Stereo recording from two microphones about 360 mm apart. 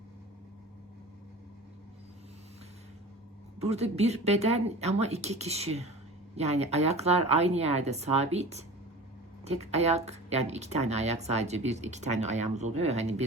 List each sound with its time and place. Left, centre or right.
3.6 s speech: centre
9.7 s speech: centre